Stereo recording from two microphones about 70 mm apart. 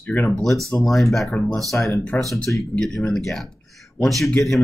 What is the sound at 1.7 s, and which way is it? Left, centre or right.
Speech, left.